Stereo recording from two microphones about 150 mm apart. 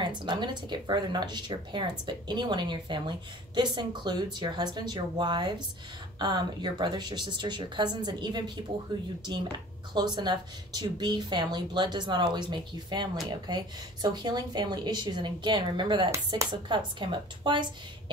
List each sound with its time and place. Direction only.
0.0 s a woman's voice: 30° right (ahead or behind)
9.9 s a woman's voice: 30° right (ahead or behind)